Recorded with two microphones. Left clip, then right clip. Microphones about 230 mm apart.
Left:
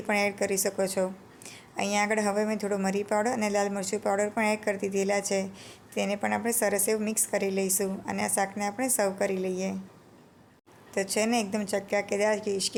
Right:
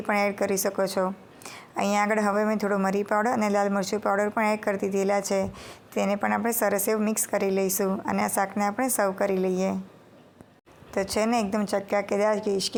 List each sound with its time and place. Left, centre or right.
0.1 s a woman's voice: centre
10.9 s a woman's voice: centre